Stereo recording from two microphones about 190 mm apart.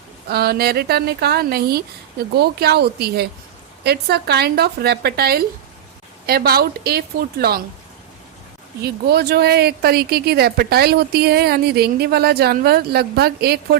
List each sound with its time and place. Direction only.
0.3 s speech: 55° right (ahead or behind)
8.8 s speech: 55° right (ahead or behind)